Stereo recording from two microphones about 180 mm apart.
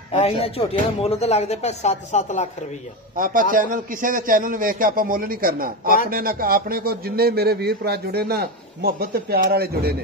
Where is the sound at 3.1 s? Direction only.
50° right (ahead or behind).